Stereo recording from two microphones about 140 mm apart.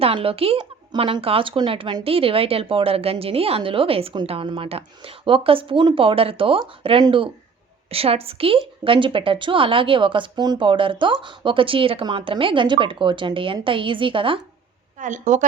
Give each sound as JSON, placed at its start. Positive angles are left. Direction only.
{"t": 0.0, "sound": "speech", "side_deg": -40}
{"t": 14.9, "sound": "a woman's voice", "side_deg": -65}